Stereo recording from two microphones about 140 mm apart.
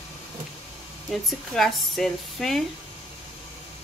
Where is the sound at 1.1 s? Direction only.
Centre (ahead or behind).